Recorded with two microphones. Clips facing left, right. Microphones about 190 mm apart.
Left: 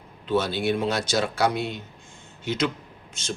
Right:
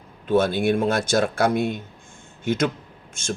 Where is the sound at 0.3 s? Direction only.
50° right (ahead or behind).